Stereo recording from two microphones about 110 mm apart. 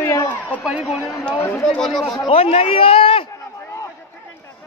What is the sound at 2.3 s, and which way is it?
Speech, 60° left (ahead or behind).